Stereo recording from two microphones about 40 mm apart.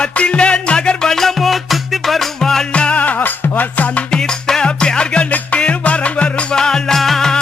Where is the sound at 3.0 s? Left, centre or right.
Left.